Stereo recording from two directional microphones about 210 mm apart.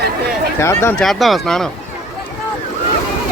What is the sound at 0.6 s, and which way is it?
Speech, 10° left (ahead or behind).